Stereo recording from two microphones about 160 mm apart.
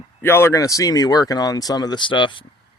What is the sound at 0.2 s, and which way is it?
Speech, 15° left (ahead or behind).